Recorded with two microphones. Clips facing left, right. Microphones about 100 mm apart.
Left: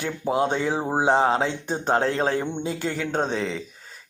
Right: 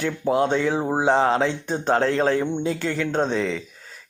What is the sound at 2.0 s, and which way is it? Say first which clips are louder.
A man's voice: right 3 dB; 25° left (ahead or behind).